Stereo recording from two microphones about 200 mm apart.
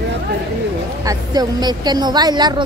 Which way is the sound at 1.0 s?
20° right (ahead or behind).